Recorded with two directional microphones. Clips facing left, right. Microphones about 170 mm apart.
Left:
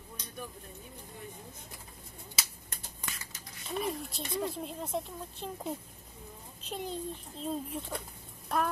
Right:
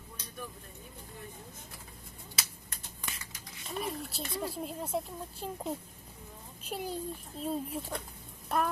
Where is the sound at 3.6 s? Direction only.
Centre (ahead or behind).